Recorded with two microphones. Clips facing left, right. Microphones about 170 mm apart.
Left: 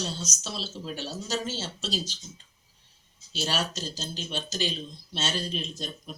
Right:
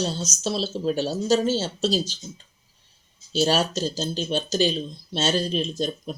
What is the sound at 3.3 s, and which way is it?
Speech, 35° right (ahead or behind).